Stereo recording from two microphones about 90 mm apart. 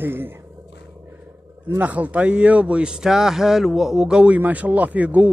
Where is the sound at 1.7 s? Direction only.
15° right (ahead or behind).